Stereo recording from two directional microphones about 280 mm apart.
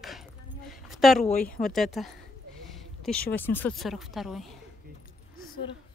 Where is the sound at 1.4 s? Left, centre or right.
Centre.